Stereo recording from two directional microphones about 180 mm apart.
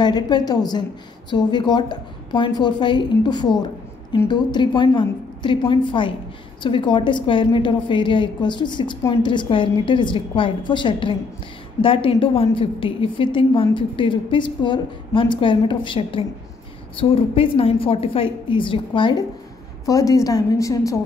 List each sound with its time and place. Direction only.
0.0 s a woman's voice: 25° left (ahead or behind)